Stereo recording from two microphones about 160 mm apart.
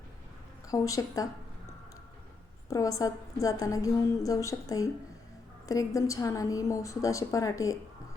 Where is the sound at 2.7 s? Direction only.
20° left (ahead or behind).